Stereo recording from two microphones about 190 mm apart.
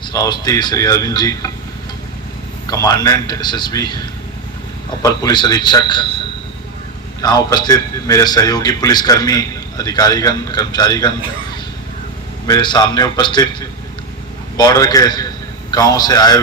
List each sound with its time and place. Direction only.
0.0 s a man's voice: 20° left (ahead or behind)
2.6 s a man's voice: 20° left (ahead or behind)
7.2 s a man's voice: 20° left (ahead or behind)
12.5 s a man's voice: 25° left (ahead or behind)